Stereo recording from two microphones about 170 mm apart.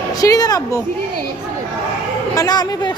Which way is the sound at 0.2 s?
20° left (ahead or behind).